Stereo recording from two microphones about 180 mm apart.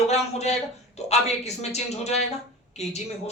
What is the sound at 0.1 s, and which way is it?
A woman's voice, 35° left (ahead or behind).